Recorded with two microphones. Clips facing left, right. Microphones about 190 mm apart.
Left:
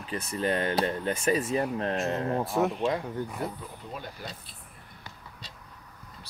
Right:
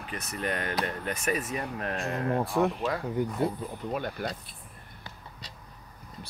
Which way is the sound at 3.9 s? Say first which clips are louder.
Right 8 dB; 65° right (ahead or behind).